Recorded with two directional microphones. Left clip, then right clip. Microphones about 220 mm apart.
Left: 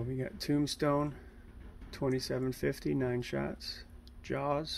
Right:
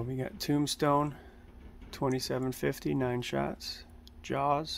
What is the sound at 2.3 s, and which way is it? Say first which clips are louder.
Speech: right 2 dB; 20° right (ahead or behind).